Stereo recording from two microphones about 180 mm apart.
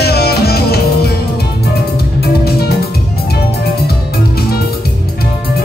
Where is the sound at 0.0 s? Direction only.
60° left (ahead or behind).